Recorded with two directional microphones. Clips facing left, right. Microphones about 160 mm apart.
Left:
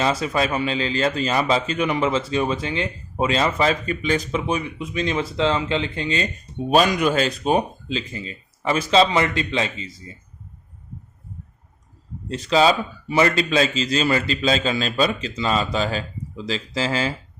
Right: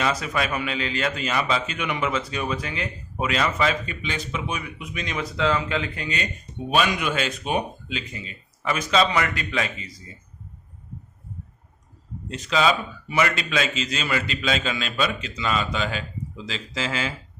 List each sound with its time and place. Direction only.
0.0 s a man's voice: 30° left (ahead or behind)
6.7 s speech: 40° left (ahead or behind)
12.3 s speech: 35° left (ahead or behind)